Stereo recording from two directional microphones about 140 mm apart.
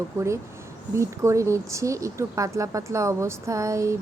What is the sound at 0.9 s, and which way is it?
Speech, 20° right (ahead or behind).